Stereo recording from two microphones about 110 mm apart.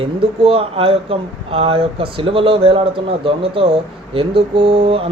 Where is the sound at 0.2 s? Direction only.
60° right (ahead or behind).